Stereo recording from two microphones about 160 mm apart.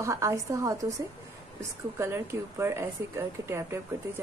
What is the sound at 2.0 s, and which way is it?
Speech, 15° right (ahead or behind).